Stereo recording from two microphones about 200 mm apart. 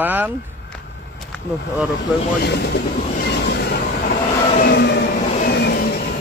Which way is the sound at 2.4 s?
55° left (ahead or behind).